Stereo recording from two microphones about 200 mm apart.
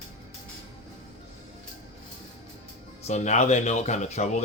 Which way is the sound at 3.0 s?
35° left (ahead or behind).